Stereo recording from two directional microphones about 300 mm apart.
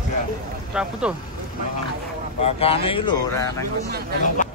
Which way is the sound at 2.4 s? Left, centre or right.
Centre.